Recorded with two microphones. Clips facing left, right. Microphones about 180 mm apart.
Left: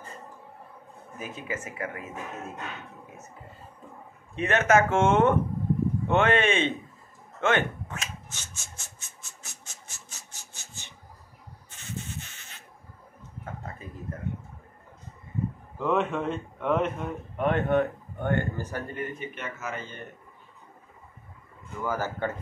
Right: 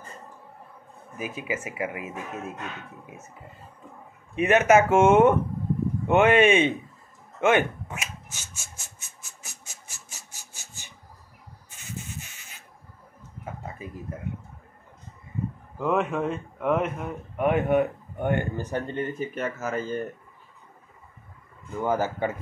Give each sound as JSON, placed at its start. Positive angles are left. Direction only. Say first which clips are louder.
{"t": 1.1, "sound": "speech", "louder": "right 4 dB", "side_deg": -10}
{"t": 4.4, "sound": "speech", "louder": "right 4 dB", "side_deg": -15}
{"t": 8.4, "sound": "rub", "louder": "even", "side_deg": 20}
{"t": 10.3, "sound": "filing", "louder": "even", "side_deg": 20}
{"t": 13.4, "sound": "a sound", "louder": "right 2 dB", "side_deg": -10}
{"t": 15.8, "sound": "speech", "louder": "right 1 dB", "side_deg": -5}
{"t": 19.1, "sound": "speech", "louder": "right 7 dB", "side_deg": -40}
{"t": 21.8, "sound": "speech", "louder": "right 4 dB", "side_deg": -20}